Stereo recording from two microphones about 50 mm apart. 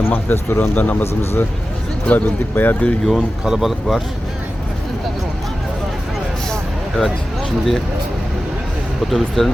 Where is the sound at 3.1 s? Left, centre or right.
Centre.